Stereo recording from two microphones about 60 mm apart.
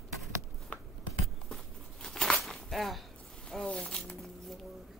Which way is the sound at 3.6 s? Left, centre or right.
Centre.